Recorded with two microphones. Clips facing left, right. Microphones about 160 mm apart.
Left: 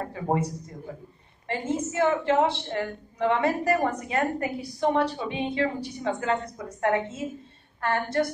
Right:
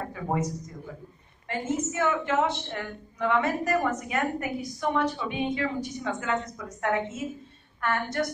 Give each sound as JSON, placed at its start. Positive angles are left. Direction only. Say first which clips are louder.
{"t": 0.1, "sound": "a man's voice", "louder": "left 3 dB", "side_deg": 30}
{"t": 1.5, "sound": "a woman's voice", "louder": "left 1 dB", "side_deg": 30}